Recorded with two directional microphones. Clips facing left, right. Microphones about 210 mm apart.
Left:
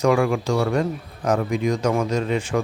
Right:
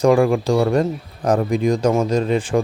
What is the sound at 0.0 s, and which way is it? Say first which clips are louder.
Speech: right 4 dB; 35° right (ahead or behind).